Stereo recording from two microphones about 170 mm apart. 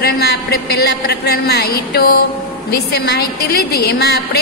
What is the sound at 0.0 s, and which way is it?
A woman's voice, 70° left (ahead or behind).